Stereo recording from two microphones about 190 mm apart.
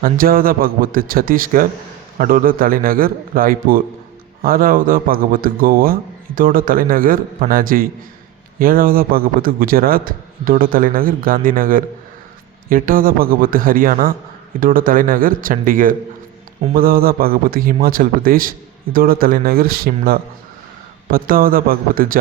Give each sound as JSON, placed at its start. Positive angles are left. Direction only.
{"t": 0.0, "sound": "a man's voice", "side_deg": -50}